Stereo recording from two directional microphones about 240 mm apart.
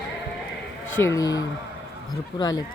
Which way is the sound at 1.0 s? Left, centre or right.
Centre.